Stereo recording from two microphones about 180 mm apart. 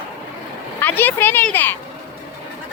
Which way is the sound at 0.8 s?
10° left (ahead or behind).